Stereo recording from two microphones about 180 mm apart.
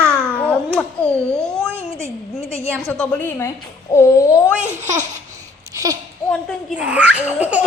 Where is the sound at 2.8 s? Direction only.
10° left (ahead or behind).